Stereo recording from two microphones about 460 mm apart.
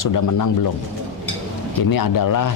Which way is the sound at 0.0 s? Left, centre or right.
Left.